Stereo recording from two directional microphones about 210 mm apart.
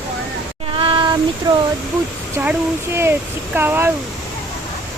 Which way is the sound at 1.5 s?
20° right (ahead or behind).